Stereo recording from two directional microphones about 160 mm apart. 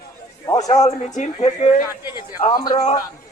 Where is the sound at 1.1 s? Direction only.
45° left (ahead or behind).